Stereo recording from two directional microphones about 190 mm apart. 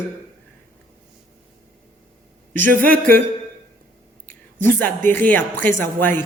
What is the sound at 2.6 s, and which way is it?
Speech, 45° right (ahead or behind).